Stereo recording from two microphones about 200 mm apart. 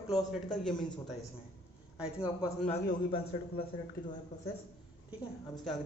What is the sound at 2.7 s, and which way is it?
Speech, 30° left (ahead or behind).